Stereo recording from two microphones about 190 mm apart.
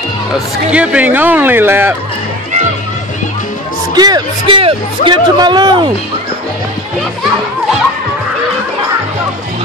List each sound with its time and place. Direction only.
0.3 s speech: 5° right (ahead or behind)
3.9 s a man's voice: 20° right (ahead or behind)